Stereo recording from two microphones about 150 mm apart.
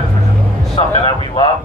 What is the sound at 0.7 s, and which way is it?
Speech, 35° left (ahead or behind).